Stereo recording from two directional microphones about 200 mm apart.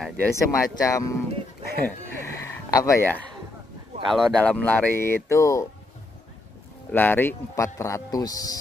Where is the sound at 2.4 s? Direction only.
15° left (ahead or behind).